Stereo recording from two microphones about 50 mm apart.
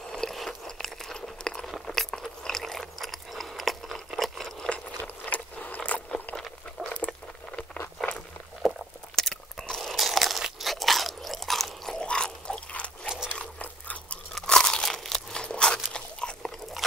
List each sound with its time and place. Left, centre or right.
0.1 s biting: centre
0.4 s a sound: centre
4.6 s a sound: left
6.8 s patter: centre
8.0 s walk: centre
8.6 s crunch: centre
12.0 s a sound: centre
14.3 s crunch: centre
15.4 s crunch: left